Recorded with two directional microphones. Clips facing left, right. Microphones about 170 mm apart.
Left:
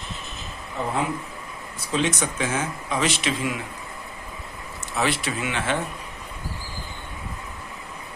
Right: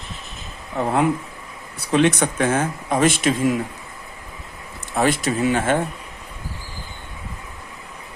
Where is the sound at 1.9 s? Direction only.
60° right (ahead or behind); by 3.6 s 45° right (ahead or behind).